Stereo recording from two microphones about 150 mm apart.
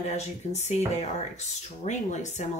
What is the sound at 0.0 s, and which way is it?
Speech, 45° left (ahead or behind).